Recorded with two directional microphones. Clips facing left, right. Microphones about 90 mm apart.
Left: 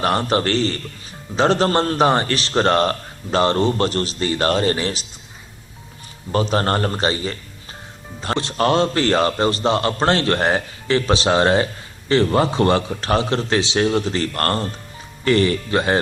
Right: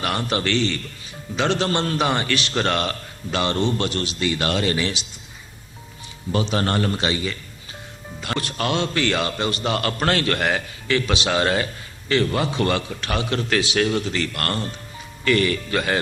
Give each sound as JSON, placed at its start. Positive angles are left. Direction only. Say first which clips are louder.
{"t": 0.0, "sound": "a man's voice", "louder": "left 5 dB", "side_deg": 35}
{"t": 6.3, "sound": "a man's voice", "louder": "left 3 dB", "side_deg": 40}